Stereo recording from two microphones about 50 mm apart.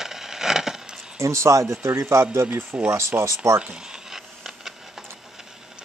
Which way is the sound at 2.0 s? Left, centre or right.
Right.